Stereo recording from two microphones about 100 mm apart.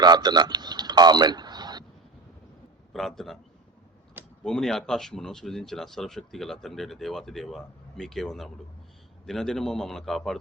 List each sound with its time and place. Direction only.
0.0 s a sound: 45° right (ahead or behind)
2.9 s speech: centre (ahead or behind)
4.4 s speech: 5° left (ahead or behind)